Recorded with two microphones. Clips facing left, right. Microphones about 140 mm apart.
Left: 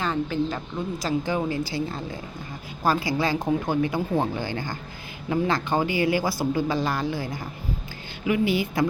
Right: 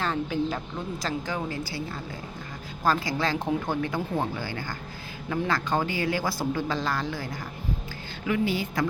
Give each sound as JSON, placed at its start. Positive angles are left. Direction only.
{"t": 0.0, "sound": "speech", "side_deg": 0}
{"t": 1.0, "sound": "speech", "side_deg": 15}
{"t": 3.2, "sound": "speech", "side_deg": 10}